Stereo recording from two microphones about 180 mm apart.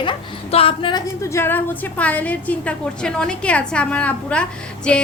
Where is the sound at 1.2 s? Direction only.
15° left (ahead or behind).